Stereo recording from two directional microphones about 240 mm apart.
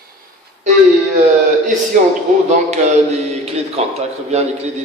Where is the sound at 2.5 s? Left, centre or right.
Right.